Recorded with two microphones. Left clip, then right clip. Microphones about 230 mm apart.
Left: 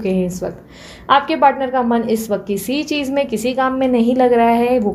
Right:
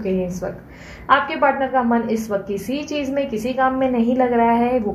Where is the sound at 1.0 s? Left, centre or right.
Left.